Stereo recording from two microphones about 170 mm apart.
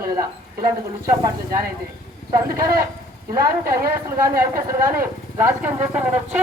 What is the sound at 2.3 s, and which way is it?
A woman's voice, 20° right (ahead or behind).